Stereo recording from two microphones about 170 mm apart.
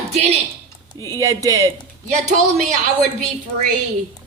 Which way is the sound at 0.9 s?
20° right (ahead or behind).